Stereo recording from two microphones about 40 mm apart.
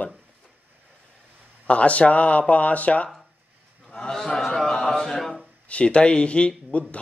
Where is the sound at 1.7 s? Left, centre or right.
Left.